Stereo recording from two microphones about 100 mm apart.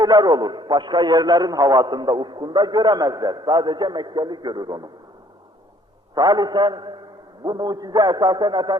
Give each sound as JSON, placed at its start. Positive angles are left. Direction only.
{"t": 0.0, "sound": "a man's voice", "side_deg": -40}
{"t": 6.1, "sound": "a man's voice", "side_deg": -45}